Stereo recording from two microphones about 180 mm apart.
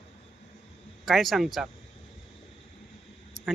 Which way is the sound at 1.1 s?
Centre (ahead or behind).